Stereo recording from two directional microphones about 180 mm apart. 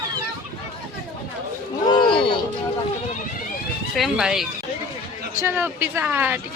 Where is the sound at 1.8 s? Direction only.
25° left (ahead or behind).